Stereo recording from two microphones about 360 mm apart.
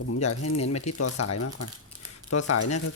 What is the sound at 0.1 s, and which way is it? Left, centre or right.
Speech, left.